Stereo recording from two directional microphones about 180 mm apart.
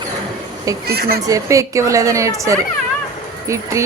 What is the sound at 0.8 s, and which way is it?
Speech, 60° right (ahead or behind).